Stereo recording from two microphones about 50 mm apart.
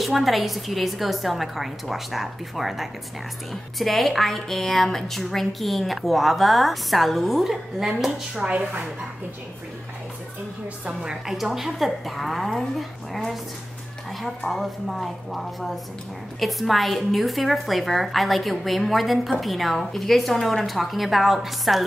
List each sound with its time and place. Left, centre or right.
0.0 s a woman's voice: centre
8.4 s speech: right
11.0 s a woman's voice: centre